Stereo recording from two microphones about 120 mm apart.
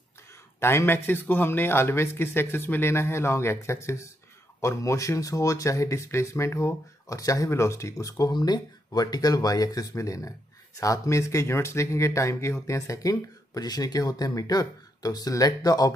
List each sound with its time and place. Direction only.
0.6 s speech: 20° left (ahead or behind)